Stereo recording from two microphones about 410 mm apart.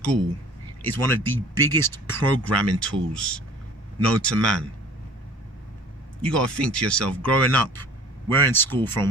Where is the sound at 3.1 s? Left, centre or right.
Centre.